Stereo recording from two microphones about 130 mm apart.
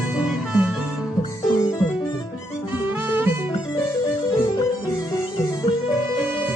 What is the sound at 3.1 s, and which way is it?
Music, 15° right (ahead or behind).